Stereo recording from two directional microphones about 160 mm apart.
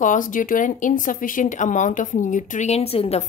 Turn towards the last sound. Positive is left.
turn(degrees=40)  # may be behind; listen again after turning